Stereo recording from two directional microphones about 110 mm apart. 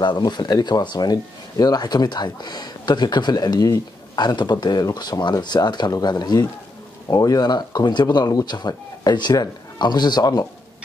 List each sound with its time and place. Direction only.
0.0 s speech: 45° left (ahead or behind)